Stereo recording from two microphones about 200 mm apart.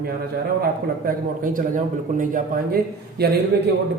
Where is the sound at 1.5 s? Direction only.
40° right (ahead or behind).